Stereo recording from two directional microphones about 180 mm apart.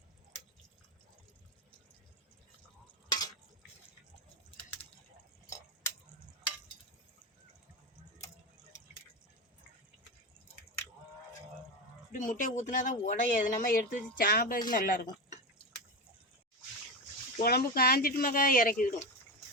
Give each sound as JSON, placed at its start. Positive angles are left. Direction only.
{"t": 3.1, "sound": "a sound", "side_deg": 20}
{"t": 12.1, "sound": "speech", "side_deg": 45}
{"t": 17.4, "sound": "speech", "side_deg": 60}